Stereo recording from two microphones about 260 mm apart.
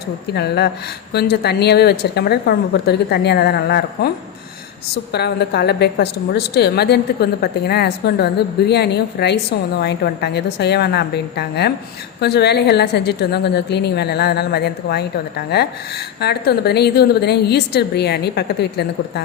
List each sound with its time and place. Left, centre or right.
0.3 s a woman's voice: left
5.1 s a woman's voice: left